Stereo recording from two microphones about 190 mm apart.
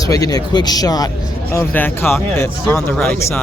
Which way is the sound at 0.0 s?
20° left (ahead or behind).